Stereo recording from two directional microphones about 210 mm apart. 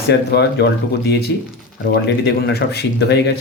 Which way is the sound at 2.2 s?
50° left (ahead or behind).